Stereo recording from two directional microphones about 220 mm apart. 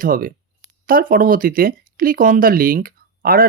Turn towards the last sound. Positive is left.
turn(degrees=-40)  # may be behind; listen again after turning